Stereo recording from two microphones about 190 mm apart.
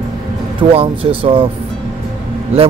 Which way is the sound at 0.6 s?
30° right (ahead or behind).